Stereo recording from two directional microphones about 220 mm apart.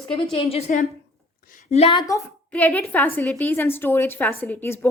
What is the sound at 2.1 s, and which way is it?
A woman's voice, 5° left (ahead or behind).